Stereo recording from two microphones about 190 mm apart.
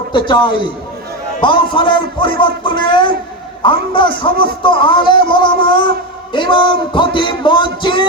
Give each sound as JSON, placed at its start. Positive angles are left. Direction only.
{"t": 0.1, "sound": "a man's voice", "side_deg": 25}